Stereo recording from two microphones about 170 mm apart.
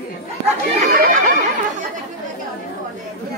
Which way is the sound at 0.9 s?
45° right (ahead or behind).